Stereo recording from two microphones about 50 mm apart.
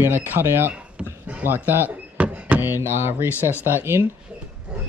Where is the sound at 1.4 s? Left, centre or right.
Right.